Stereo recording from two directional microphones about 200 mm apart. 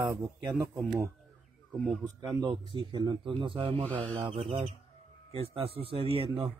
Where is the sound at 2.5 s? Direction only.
25° right (ahead or behind).